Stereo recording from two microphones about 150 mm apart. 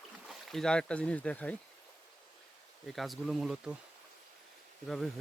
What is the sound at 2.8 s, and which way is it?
Speech, centre (ahead or behind).